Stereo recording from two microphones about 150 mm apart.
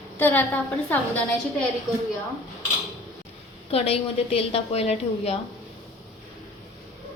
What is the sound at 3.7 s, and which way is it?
A woman's voice, 40° left (ahead or behind).